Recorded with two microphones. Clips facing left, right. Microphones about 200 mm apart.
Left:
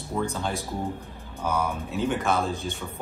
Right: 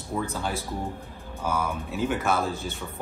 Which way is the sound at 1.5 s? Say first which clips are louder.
Left 2 dB; centre (ahead or behind).